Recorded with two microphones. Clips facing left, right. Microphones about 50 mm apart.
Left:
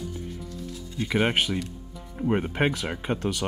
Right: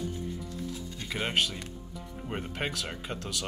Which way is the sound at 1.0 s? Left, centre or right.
Left.